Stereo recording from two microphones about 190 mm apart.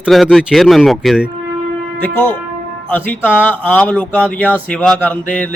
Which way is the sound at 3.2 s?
5° right (ahead or behind).